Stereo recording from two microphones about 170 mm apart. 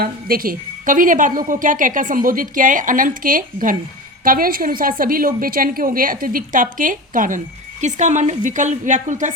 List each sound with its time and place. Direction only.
0.0 s a woman's voice: 60° right (ahead or behind)